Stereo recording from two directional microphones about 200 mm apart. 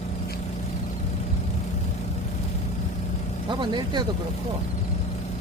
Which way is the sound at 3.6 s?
20° right (ahead or behind).